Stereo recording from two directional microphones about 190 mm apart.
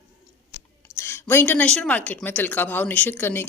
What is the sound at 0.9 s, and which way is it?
A woman's voice, 15° left (ahead or behind).